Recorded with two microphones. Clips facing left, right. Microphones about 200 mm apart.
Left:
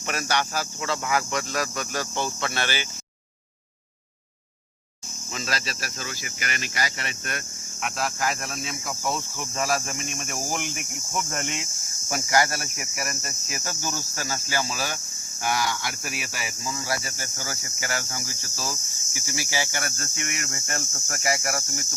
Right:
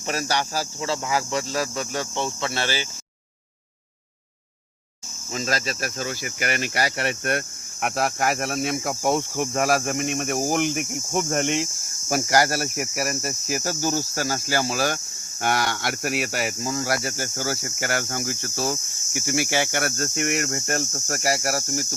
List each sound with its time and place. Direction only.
0.1 s speech: 35° right (ahead or behind)
5.3 s speech: 45° right (ahead or behind)
10.3 s cricket: 50° right (ahead or behind)
11.4 s speech: 55° right (ahead or behind); by 21.8 s 40° right (ahead or behind)